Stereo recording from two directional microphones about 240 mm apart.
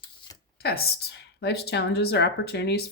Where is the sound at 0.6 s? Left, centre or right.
Left.